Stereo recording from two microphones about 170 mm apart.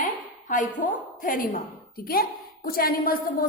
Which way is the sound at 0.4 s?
50° left (ahead or behind).